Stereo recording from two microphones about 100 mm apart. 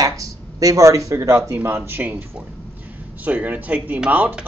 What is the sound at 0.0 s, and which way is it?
Speech, 35° right (ahead or behind).